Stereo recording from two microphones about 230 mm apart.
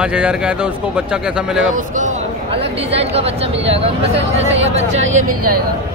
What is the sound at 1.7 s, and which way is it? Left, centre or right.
Speech, right.